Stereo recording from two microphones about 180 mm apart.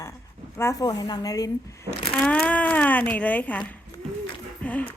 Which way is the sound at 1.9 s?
30° left (ahead or behind).